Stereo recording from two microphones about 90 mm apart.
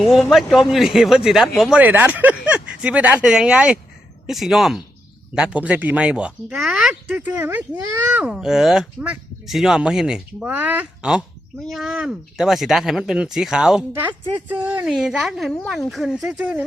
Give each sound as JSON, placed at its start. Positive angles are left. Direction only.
{"t": 0.0, "sound": "speech", "side_deg": 0}
{"t": 1.8, "sound": "speech", "side_deg": -20}
{"t": 8.3, "sound": "speech", "side_deg": -5}
{"t": 10.5, "sound": "speech", "side_deg": -20}
{"t": 13.9, "sound": "speech", "side_deg": -20}
{"t": 14.8, "sound": "speech", "side_deg": -5}
{"t": 16.2, "sound": "speech", "side_deg": -10}